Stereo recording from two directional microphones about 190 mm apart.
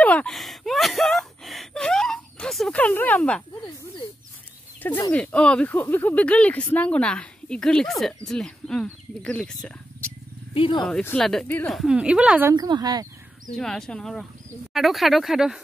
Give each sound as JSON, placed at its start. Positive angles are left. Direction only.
{"t": 0.0, "sound": "a sound", "side_deg": 5}
{"t": 4.8, "sound": "speech", "side_deg": 20}
{"t": 5.1, "sound": "speech", "side_deg": 5}
{"t": 10.5, "sound": "speech", "side_deg": 30}
{"t": 10.8, "sound": "speech", "side_deg": 5}
{"t": 12.5, "sound": "speech", "side_deg": -20}
{"t": 13.5, "sound": "speech", "side_deg": 5}